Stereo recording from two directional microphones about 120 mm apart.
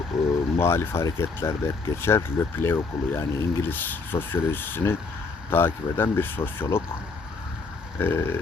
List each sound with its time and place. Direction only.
0.1 s vehicle: centre (ahead or behind)
0.5 s speech: 20° left (ahead or behind)
7.9 s speech: 20° left (ahead or behind)